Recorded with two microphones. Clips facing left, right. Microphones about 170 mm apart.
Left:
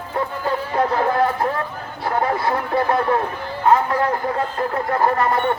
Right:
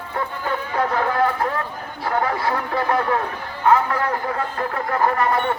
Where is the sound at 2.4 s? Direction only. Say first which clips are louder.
Left 2 dB; 25° left (ahead or behind).